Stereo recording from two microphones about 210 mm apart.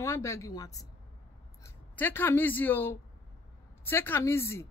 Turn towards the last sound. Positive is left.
turn(degrees=10)  # may be behind; listen again after turning